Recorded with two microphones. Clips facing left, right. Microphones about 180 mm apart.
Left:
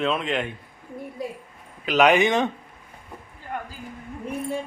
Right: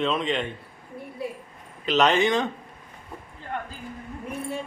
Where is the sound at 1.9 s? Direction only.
10° left (ahead or behind).